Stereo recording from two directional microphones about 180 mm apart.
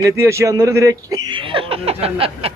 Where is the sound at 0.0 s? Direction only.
15° right (ahead or behind).